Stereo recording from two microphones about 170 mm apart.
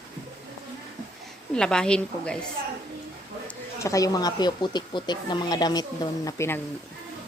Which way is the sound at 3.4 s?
20° left (ahead or behind).